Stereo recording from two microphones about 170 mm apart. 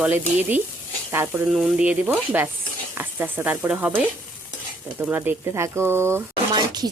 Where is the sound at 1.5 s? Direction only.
5° right (ahead or behind).